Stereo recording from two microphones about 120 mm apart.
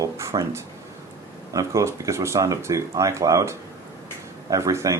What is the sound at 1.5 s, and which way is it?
Speech, 25° right (ahead or behind).